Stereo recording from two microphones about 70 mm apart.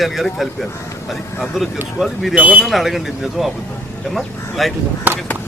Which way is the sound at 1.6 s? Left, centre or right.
Centre.